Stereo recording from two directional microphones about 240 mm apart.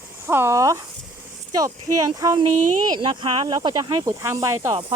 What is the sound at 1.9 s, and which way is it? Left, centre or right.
Speech, centre.